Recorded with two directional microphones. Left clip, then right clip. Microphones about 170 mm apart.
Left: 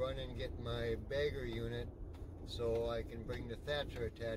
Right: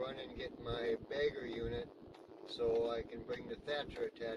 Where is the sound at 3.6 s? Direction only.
20° left (ahead or behind).